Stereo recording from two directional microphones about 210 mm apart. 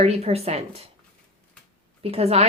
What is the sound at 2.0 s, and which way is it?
Speech, 30° right (ahead or behind).